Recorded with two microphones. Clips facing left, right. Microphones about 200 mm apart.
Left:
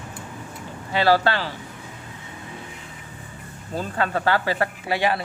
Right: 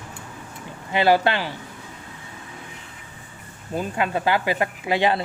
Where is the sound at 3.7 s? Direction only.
15° right (ahead or behind).